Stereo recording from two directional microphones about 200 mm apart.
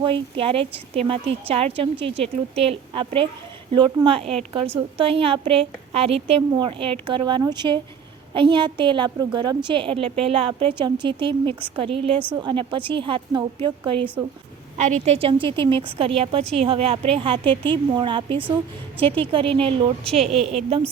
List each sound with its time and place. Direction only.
0.0 s a woman's voice: 25° right (ahead or behind)
14.8 s a woman's voice: 35° right (ahead or behind)